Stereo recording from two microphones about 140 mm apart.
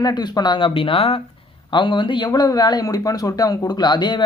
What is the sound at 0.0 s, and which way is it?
Speech, 30° left (ahead or behind).